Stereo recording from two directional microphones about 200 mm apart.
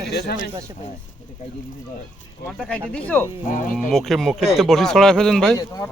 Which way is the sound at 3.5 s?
40° left (ahead or behind).